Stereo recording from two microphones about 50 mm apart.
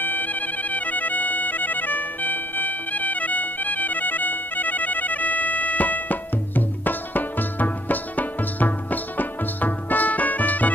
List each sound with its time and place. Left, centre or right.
0.0 s music: left